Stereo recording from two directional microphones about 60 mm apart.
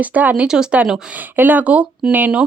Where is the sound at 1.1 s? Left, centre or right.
Right.